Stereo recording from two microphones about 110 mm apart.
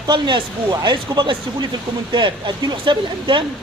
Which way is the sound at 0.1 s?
45° right (ahead or behind).